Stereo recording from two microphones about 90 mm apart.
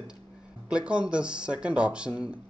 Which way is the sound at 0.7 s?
10° right (ahead or behind).